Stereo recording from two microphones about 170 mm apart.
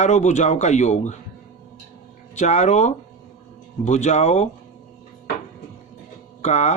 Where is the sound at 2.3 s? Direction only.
40° left (ahead or behind).